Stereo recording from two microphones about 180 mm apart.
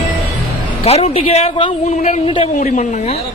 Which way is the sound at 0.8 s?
35° left (ahead or behind).